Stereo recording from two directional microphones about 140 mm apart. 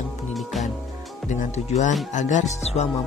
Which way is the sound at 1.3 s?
55° left (ahead or behind).